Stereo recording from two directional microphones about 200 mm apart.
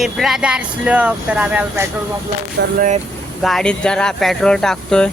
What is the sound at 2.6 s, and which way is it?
Speech, 55° right (ahead or behind).